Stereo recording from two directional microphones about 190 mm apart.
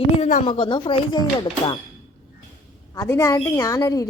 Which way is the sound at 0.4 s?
25° left (ahead or behind).